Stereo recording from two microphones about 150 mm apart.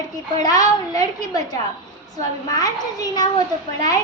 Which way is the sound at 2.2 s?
25° left (ahead or behind).